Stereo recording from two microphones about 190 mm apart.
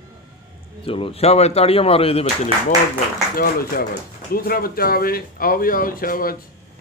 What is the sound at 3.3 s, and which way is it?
Speech, 50° left (ahead or behind).